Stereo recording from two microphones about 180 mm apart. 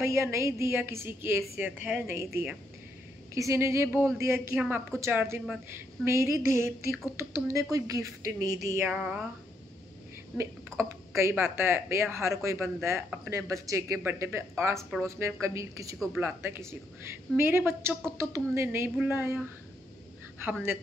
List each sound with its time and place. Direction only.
0.0 s a woman's voice: 15° right (ahead or behind)
10.3 s a woman's voice: 15° right (ahead or behind)